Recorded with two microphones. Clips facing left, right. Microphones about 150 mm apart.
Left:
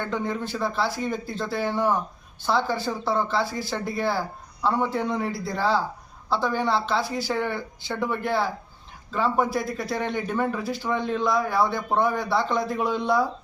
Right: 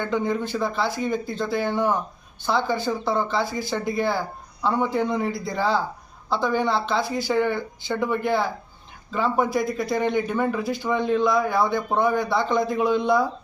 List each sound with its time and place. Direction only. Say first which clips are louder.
0.0 s speech: right 4 dB; centre (ahead or behind)